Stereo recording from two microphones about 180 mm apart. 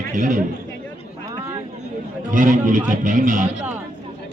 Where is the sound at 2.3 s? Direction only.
45° right (ahead or behind).